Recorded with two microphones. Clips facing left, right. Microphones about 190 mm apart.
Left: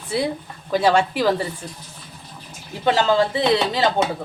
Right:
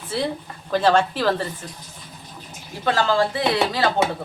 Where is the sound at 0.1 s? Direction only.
15° left (ahead or behind).